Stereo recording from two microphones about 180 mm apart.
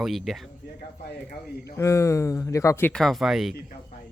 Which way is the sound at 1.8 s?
15° left (ahead or behind).